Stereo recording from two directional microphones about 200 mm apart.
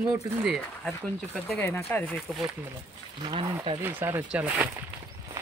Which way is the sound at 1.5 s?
10° left (ahead or behind).